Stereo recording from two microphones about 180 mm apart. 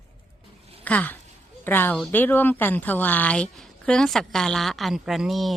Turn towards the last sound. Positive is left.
turn(degrees=0)  # may be behind; listen again after turning